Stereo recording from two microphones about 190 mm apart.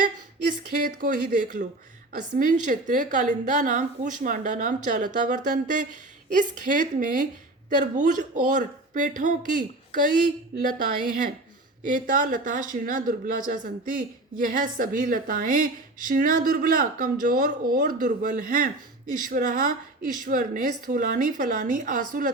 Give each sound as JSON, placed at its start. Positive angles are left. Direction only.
{"t": 0.8, "sound": "a woman's voice", "side_deg": -45}